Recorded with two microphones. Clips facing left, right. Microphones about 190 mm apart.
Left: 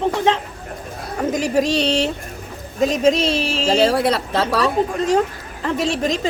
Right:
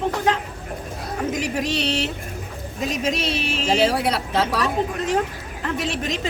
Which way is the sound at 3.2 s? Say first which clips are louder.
Left 5 dB; 30° left (ahead or behind).